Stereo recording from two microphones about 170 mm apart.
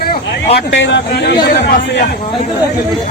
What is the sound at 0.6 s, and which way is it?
Speech, 90° left.